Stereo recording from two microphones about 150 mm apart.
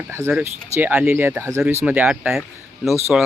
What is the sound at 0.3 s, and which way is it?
Speech, 10° right (ahead or behind).